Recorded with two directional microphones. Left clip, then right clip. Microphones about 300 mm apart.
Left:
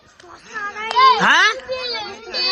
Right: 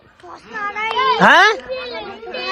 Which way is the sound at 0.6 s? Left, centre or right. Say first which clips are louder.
Right 4 dB; centre.